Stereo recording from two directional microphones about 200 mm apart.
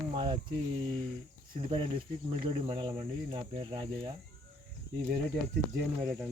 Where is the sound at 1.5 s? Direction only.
25° right (ahead or behind).